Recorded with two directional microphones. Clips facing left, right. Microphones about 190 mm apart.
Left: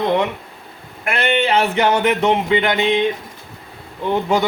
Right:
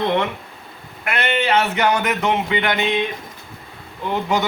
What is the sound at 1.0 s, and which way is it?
Speech, 30° left (ahead or behind).